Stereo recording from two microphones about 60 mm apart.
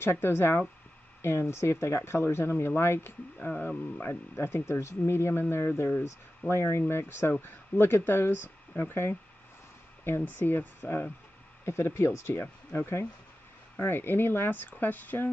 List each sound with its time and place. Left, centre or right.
0.0 s speech: left
3.3 s speech: left
4.1 s speech: left
6.5 s speech: left
11.6 s speech: left